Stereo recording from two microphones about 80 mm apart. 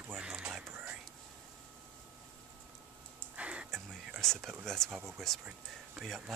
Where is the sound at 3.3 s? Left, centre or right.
Centre.